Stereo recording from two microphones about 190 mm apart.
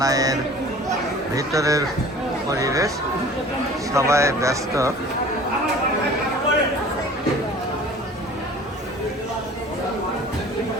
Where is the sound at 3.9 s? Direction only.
15° right (ahead or behind).